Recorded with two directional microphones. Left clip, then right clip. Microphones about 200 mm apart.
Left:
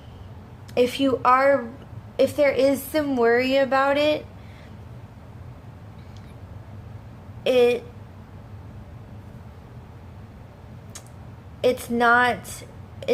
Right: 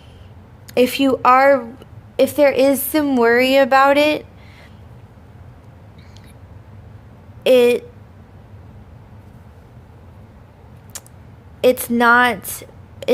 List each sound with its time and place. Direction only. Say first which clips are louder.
0.7 s a woman's voice: right 5 dB; 50° right (ahead or behind)
7.4 s a woman's voice: right 6 dB; 50° right (ahead or behind)
11.6 s a woman's voice: right 6 dB; 50° right (ahead or behind)